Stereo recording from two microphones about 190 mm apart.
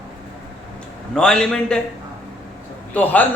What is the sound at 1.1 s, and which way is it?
Speech, 5° left (ahead or behind).